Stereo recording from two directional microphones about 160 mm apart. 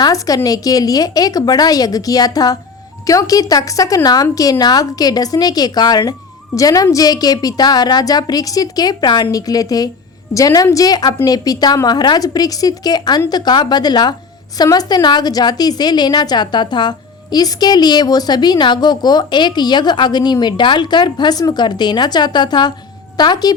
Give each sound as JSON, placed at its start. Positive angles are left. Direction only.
{"t": 0.0, "sound": "a woman's voice", "side_deg": 20}